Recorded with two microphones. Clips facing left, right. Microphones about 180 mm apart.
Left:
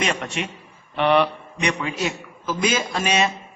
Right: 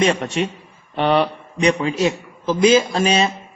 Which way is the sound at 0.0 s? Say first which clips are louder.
Right 7 dB; 35° right (ahead or behind).